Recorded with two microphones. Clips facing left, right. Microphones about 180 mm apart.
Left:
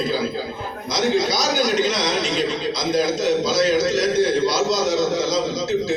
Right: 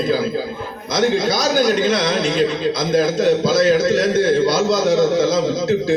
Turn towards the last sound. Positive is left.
turn(degrees=-55)  # may be behind; listen again after turning